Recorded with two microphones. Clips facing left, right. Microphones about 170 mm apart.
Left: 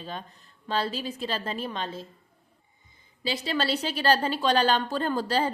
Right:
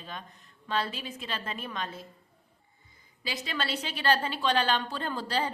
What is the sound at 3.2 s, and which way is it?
A woman's voice, 30° left (ahead or behind).